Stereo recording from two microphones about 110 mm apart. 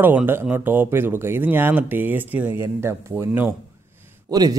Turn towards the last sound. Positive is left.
turn(degrees=-35)  # may be behind; listen again after turning